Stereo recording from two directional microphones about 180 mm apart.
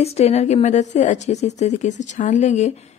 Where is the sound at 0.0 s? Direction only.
35° left (ahead or behind).